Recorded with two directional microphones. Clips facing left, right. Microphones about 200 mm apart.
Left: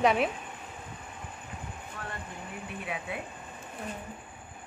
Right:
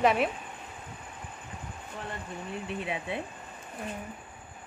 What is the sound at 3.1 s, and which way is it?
Speech, 30° right (ahead or behind).